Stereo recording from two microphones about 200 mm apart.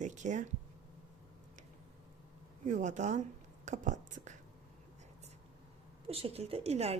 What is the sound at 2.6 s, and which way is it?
A woman's voice, 40° right (ahead or behind).